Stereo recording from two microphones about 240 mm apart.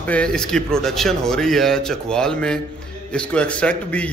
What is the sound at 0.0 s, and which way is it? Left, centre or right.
A man's voice, centre.